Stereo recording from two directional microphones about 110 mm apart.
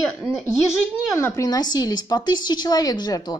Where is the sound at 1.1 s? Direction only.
30° left (ahead or behind).